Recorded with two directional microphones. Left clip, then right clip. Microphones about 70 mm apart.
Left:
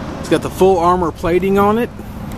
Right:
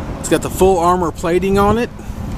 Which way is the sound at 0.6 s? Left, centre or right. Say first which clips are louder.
Left 1 dB; centre.